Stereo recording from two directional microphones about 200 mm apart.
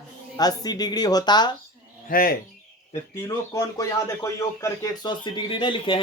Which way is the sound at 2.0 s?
45° left (ahead or behind).